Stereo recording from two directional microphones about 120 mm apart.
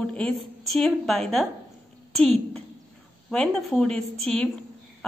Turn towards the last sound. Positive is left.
turn(degrees=10)  # may be behind; listen again after turning